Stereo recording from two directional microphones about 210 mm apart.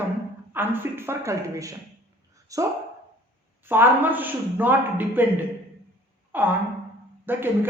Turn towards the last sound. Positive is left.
turn(degrees=-10)  # may be behind; listen again after turning